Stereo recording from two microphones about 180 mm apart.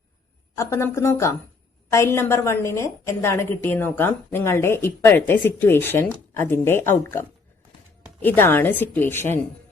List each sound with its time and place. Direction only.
0.5 s a woman's voice: 15° left (ahead or behind)
8.2 s a woman's voice: 10° left (ahead or behind)